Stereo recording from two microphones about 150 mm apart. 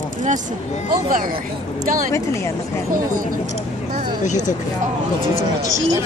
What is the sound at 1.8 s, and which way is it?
Speech, 60° right (ahead or behind).